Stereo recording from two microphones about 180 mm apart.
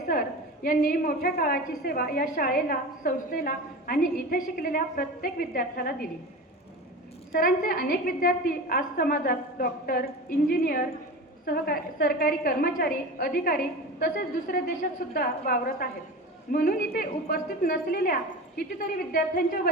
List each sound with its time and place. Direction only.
0.1 s a woman's voice: 50° left (ahead or behind)
7.3 s a woman's voice: 50° left (ahead or behind)